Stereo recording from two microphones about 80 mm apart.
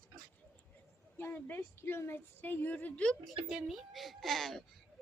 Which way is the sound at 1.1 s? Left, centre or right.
Left.